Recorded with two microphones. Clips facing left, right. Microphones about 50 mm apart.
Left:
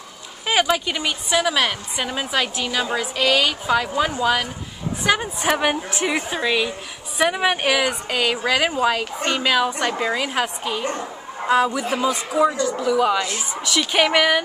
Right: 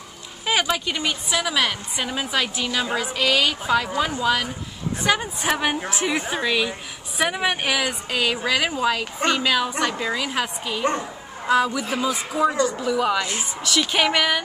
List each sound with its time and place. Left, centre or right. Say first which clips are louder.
0.5 s a woman's voice: left 3 dB; centre
12.4 s speech: even; right
12.8 s a woman's voice: left 3 dB; centre